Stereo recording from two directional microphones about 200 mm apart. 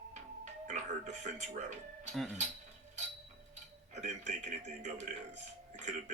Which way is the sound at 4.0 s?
35° right (ahead or behind).